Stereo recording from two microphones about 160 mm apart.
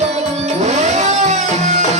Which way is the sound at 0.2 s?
45° right (ahead or behind).